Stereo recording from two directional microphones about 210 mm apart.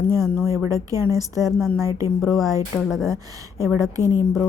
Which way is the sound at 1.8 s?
15° right (ahead or behind).